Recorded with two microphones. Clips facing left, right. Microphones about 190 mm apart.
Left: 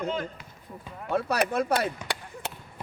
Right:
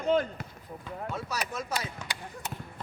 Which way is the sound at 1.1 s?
60° left (ahead or behind).